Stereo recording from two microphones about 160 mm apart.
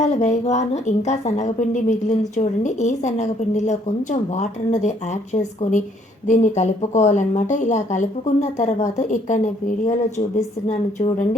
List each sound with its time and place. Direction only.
0.0 s a woman's voice: 45° left (ahead or behind)